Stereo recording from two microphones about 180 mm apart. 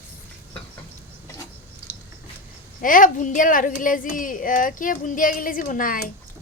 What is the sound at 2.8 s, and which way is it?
Speech, 50° left (ahead or behind).